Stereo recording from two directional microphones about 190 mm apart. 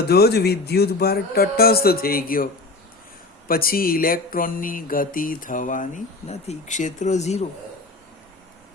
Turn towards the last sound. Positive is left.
turn(degrees=35)  # may be behind; listen again after turning